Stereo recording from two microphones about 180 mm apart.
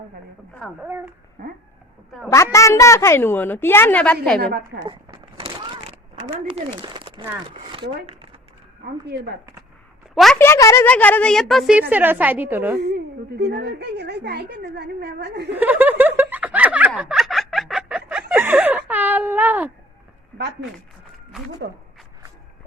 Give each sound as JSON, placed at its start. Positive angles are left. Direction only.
{"t": 0.8, "sound": "speech", "side_deg": -10}
{"t": 1.4, "sound": "a woman's voice", "side_deg": -65}
{"t": 2.3, "sound": "a woman's voice", "side_deg": 15}
{"t": 4.9, "sound": "a sound", "side_deg": -30}
{"t": 6.5, "sound": "speech", "side_deg": -25}
{"t": 10.3, "sound": "a woman's voice", "side_deg": 15}
{"t": 12.8, "sound": "a woman's voice", "side_deg": -65}
{"t": 15.5, "sound": "snicker", "side_deg": -10}
{"t": 17.0, "sound": "a sound", "side_deg": -5}
{"t": 21.6, "sound": "speech", "side_deg": -70}